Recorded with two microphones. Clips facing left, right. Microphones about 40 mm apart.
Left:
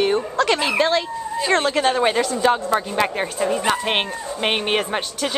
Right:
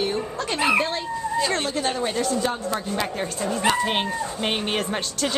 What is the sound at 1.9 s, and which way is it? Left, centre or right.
Speech, left.